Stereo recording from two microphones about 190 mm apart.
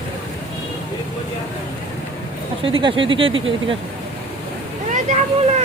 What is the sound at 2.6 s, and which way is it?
Speech, 25° right (ahead or behind).